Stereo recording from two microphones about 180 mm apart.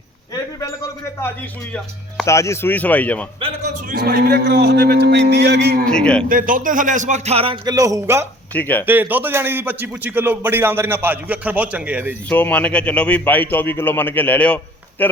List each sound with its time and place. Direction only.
2.2 s speech: 15° left (ahead or behind)
3.4 s a man's voice: 45° right (ahead or behind); by 5.8 s 65° right (ahead or behind)
5.8 s a man's voice: 5° left (ahead or behind)
6.2 s speech: 50° right (ahead or behind); by 7.6 s 30° right (ahead or behind)
7.6 s a man's voice: 20° right (ahead or behind)
8.5 s speech: 10° left (ahead or behind)
8.9 s a man's voice: 10° right (ahead or behind)
12.3 s speech: 10° left (ahead or behind)